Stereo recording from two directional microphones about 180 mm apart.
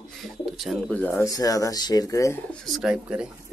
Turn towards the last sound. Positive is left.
turn(degrees=-5)  # may be behind; listen again after turning